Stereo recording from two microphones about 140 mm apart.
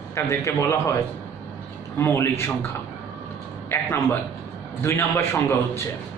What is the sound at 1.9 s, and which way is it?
Speech, 20° left (ahead or behind).